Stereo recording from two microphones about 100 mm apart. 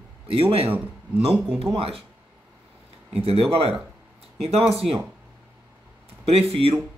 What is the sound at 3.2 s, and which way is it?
Speech, 80° right.